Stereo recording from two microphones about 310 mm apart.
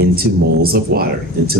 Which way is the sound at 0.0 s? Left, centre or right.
Right.